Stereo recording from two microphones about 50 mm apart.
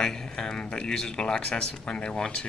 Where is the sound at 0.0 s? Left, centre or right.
Centre.